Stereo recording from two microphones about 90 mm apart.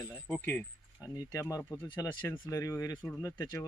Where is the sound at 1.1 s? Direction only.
40° left (ahead or behind).